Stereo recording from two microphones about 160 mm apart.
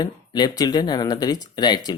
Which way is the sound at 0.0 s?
25° left (ahead or behind).